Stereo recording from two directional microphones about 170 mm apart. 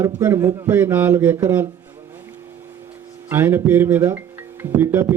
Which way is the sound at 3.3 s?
15° right (ahead or behind).